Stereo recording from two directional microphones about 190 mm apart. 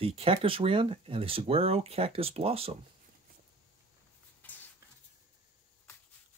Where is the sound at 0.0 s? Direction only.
30° right (ahead or behind).